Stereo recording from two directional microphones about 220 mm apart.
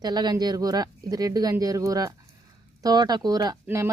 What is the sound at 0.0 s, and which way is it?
Speech, 20° right (ahead or behind).